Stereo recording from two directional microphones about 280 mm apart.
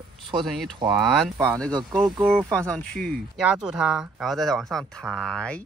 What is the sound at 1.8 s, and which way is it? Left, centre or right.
Speech, centre.